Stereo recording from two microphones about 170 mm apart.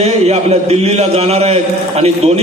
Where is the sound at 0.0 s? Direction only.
40° right (ahead or behind).